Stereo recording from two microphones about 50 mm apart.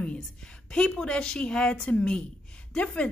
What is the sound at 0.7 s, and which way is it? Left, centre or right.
A woman's voice, centre.